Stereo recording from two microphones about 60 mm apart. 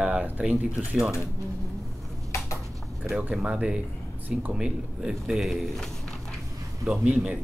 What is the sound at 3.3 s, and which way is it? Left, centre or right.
A man's voice, centre.